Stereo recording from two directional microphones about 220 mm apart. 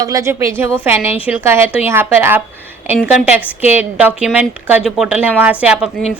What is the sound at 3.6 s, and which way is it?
A woman's voice, 10° right (ahead or behind).